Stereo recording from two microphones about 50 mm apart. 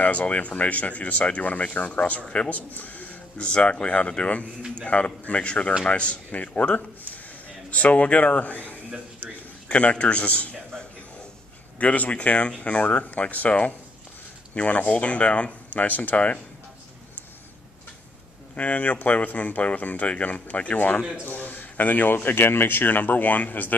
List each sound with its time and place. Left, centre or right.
0.0 s speech: left
2.2 s speech: centre
2.5 s speech: left
3.4 s speech: left
11.8 s speech: left
15.8 s speech: left
18.6 s speech: left
22.1 s speech: left